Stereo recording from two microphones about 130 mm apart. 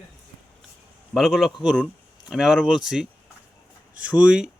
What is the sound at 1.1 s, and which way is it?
A man's voice, centre (ahead or behind).